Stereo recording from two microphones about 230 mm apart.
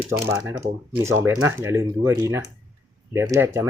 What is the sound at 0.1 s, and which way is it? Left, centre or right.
Speech, centre.